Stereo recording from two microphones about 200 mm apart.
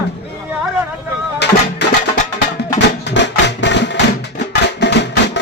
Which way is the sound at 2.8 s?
60° left (ahead or behind).